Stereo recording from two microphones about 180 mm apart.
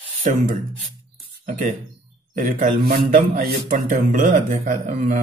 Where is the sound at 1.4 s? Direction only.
45° right (ahead or behind).